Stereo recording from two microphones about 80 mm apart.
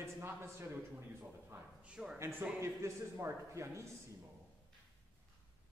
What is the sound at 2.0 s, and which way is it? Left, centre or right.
Speech, centre.